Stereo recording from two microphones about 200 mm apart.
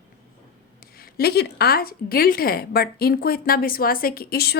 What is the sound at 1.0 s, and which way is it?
A woman's voice, 50° left (ahead or behind).